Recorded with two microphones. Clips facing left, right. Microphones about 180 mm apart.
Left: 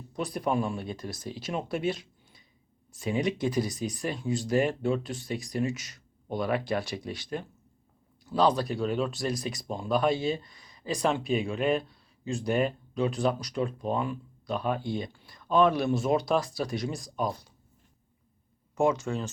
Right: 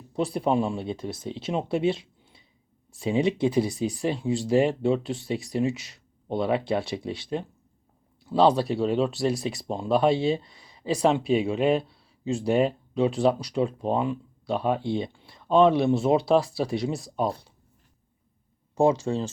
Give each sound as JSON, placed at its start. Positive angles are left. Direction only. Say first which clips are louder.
{"t": 0.1, "sound": "speech", "louder": "right 5 dB", "side_deg": -30}
{"t": 18.7, "sound": "speech", "louder": "right 4 dB", "side_deg": -30}